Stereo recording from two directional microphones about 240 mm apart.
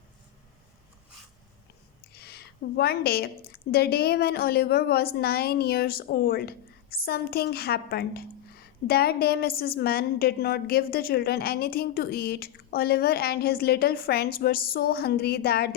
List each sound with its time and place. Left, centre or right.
2.1 s a woman's voice: left